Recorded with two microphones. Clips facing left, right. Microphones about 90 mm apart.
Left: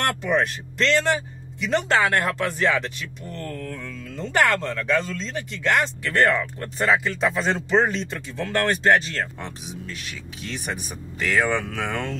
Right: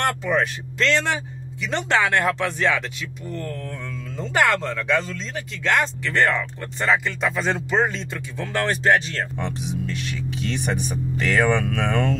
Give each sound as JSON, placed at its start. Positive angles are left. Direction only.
{"t": 0.0, "sound": "speech", "side_deg": 0}
{"t": 3.3, "sound": "mantra", "side_deg": -15}
{"t": 4.7, "sound": "speech", "side_deg": 0}